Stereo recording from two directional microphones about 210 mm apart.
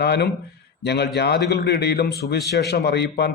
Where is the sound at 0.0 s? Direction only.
50° left (ahead or behind).